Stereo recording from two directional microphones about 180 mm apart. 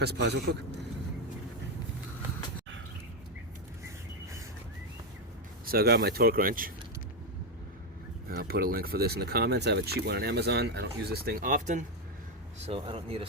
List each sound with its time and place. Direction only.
0.0 s a man's voice: 65° right (ahead or behind)
5.6 s speech: 60° right (ahead or behind)
8.4 s speech: 55° right (ahead or behind)
12.6 s speech: 30° right (ahead or behind)